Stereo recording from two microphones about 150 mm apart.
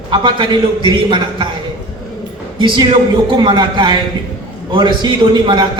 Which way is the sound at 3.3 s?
30° right (ahead or behind).